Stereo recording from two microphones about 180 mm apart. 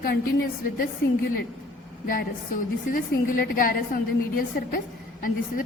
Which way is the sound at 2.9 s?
50° left (ahead or behind).